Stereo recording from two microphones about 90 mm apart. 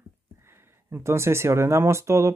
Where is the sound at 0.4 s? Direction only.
25° right (ahead or behind).